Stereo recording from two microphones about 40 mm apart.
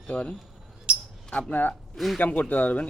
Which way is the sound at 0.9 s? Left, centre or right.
Right.